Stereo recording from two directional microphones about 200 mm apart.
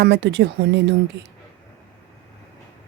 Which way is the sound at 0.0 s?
60° right (ahead or behind).